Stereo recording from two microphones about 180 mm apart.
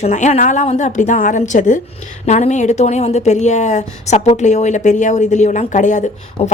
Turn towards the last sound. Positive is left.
turn(degrees=40)  # may be behind; listen again after turning